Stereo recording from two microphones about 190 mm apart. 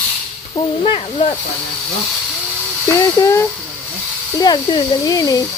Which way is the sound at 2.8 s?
15° left (ahead or behind).